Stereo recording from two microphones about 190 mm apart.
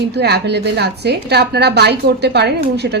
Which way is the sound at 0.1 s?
60° right (ahead or behind).